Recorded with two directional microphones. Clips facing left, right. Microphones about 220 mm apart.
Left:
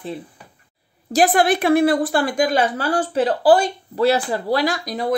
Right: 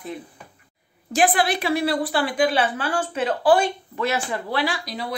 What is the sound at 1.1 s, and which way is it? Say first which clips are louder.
A woman's voice: left 4 dB; 40° left (ahead or behind).